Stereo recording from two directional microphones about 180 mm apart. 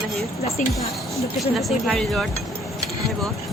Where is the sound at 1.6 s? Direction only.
Centre (ahead or behind).